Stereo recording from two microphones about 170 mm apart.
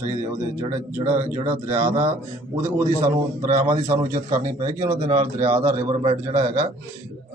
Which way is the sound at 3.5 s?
15° right (ahead or behind).